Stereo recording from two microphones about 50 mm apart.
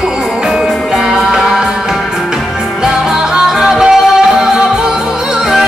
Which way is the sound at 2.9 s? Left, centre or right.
Centre.